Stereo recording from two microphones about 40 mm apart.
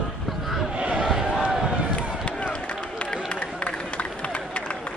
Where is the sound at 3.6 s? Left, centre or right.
Left.